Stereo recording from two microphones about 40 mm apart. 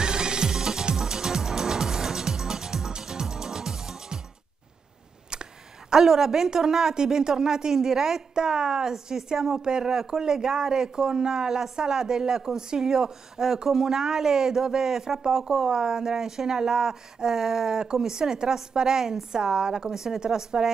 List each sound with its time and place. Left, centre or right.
0.0 s music: centre
5.3 s a woman's voice: centre